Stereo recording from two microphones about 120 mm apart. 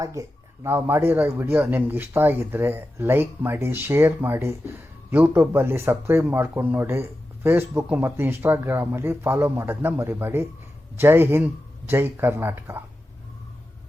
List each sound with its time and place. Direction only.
0.0 s speech: 30° right (ahead or behind)